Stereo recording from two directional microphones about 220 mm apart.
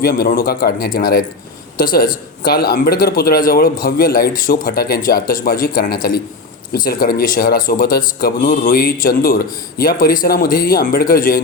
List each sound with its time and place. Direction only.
0.0 s speech: 40° left (ahead or behind)